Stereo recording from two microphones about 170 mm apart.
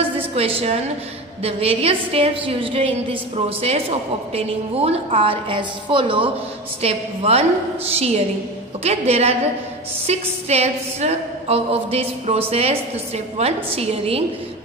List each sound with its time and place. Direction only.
0.4 s a woman's voice: 35° right (ahead or behind)